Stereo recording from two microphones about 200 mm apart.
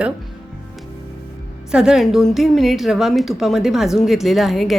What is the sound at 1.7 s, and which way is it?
A woman's voice, 5° right (ahead or behind).